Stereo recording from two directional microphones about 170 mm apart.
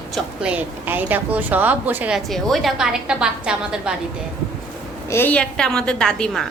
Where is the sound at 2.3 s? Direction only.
Centre (ahead or behind).